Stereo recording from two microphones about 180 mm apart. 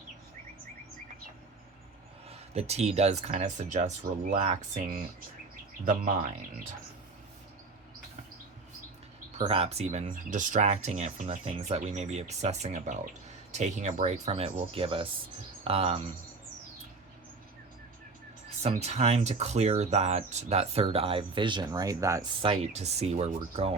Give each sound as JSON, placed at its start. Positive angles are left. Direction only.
{"t": 2.3, "sound": "speech", "side_deg": -35}
{"t": 9.4, "sound": "speech", "side_deg": -30}
{"t": 18.6, "sound": "speech", "side_deg": -35}
{"t": 22.4, "sound": "speech", "side_deg": -35}